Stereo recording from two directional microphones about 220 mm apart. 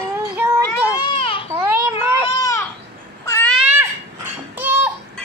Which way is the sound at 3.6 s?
10° right (ahead or behind).